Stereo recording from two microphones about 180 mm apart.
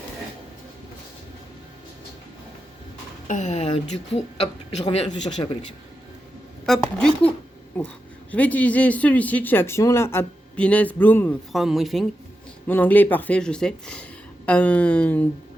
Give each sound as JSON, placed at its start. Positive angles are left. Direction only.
{"t": 3.2, "sound": "speech", "side_deg": 40}
{"t": 6.7, "sound": "speech", "side_deg": 0}
{"t": 11.5, "sound": "speech", "side_deg": 0}
{"t": 12.6, "sound": "speech", "side_deg": 10}